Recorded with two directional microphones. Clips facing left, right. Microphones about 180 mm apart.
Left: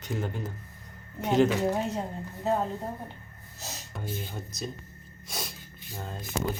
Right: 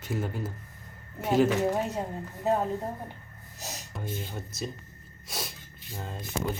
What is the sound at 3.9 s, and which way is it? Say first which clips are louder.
Speech: even; centre (ahead or behind).